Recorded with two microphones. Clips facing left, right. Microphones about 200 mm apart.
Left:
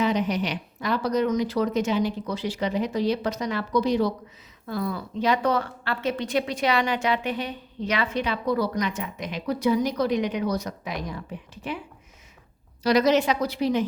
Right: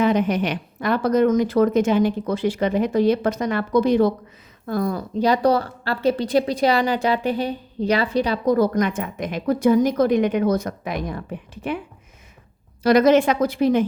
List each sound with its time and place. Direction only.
0.0 s a woman's voice: 55° right (ahead or behind)
12.8 s a woman's voice: 50° right (ahead or behind)